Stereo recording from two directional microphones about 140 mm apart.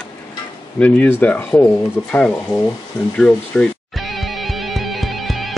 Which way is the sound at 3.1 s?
5° left (ahead or behind).